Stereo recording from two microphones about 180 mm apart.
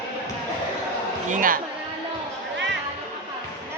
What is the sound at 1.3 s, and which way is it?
Speech, 50° right (ahead or behind).